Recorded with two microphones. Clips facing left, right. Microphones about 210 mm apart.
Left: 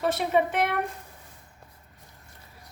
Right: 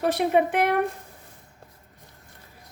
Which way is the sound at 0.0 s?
55° right (ahead or behind).